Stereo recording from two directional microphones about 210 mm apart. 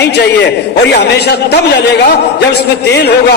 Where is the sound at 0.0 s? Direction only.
50° left (ahead or behind).